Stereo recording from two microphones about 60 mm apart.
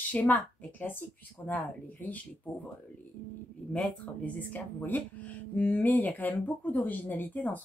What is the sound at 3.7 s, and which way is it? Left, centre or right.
A woman's voice, left.